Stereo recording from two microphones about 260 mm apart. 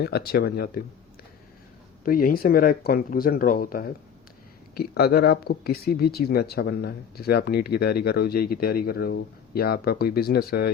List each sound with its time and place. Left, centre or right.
0.0 s speech: left
2.0 s speech: left